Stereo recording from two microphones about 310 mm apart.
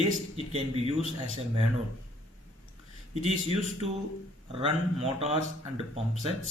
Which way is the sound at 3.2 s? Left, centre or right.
Right.